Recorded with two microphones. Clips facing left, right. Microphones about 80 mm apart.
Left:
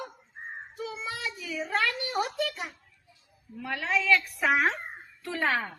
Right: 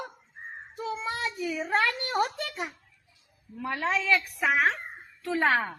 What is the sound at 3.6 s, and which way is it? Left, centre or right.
Speech, right.